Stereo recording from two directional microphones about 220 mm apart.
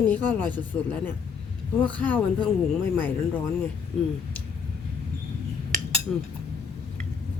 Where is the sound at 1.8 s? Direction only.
5° left (ahead or behind).